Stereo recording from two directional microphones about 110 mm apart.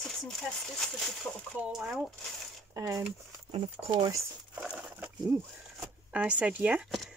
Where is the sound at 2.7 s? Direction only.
25° right (ahead or behind).